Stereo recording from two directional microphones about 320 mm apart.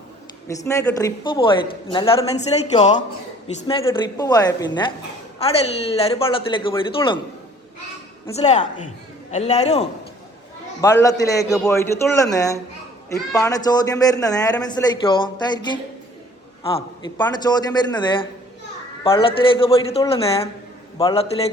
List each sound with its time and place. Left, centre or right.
0.4 s speech: centre
8.4 s a man's voice: centre